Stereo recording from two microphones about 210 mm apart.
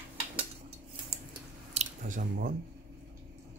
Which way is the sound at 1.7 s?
35° right (ahead or behind).